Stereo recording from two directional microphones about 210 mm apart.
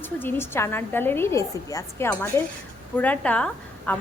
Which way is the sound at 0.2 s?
10° left (ahead or behind).